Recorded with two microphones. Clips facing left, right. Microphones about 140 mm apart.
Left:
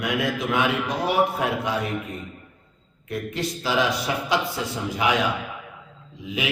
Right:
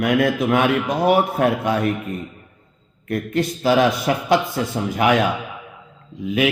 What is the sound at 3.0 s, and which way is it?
A man's voice, 55° right (ahead or behind).